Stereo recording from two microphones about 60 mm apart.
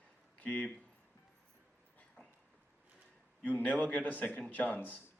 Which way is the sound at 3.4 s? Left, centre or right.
Left.